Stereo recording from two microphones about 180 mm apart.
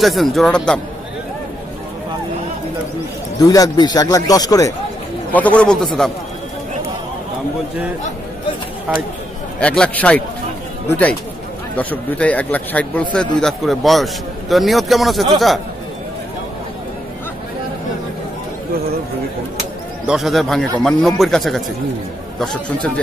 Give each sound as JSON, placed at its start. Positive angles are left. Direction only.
{"t": 0.0, "sound": "a man's voice", "side_deg": 0}
{"t": 3.3, "sound": "a man's voice", "side_deg": 20}
{"t": 5.3, "sound": "a man's voice", "side_deg": 10}
{"t": 9.6, "sound": "a man's voice", "side_deg": 5}
{"t": 20.1, "sound": "a man's voice", "side_deg": 0}